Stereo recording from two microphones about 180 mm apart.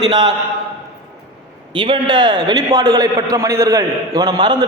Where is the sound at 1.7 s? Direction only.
25° right (ahead or behind).